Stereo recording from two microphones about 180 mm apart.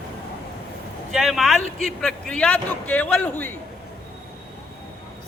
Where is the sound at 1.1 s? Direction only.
Centre (ahead or behind).